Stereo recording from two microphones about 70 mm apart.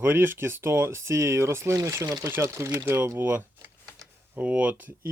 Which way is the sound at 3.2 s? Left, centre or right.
Right.